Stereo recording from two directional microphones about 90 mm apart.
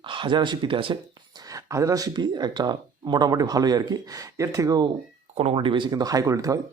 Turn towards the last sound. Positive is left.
turn(degrees=-40)  # may be behind; listen again after turning